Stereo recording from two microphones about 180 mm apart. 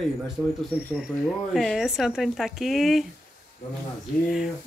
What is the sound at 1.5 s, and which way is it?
Speech, centre (ahead or behind).